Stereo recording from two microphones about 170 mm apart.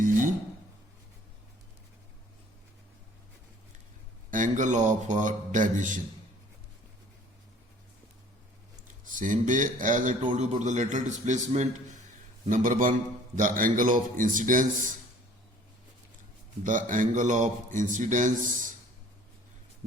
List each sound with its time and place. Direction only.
4.3 s a man's voice: 50° right (ahead or behind)
9.1 s a man's voice: 50° right (ahead or behind)
16.6 s a man's voice: 50° right (ahead or behind)